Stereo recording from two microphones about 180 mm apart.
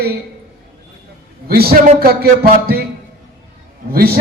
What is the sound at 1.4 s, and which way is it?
Speech, 55° right (ahead or behind).